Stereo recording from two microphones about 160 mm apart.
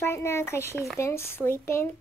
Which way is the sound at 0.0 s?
15° left (ahead or behind).